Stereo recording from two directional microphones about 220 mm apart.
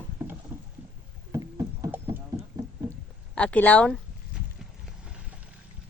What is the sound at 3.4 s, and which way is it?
Speech, 5° left (ahead or behind).